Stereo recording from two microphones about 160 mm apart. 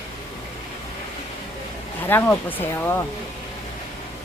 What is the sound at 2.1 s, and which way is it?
Speech, 10° left (ahead or behind).